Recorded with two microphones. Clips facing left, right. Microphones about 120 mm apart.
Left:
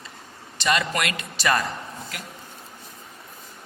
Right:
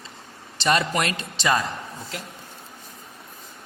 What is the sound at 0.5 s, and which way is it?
A man's voice, 35° right (ahead or behind).